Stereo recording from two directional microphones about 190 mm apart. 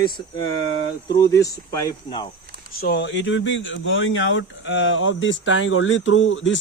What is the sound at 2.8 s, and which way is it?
Speech, 60° left (ahead or behind).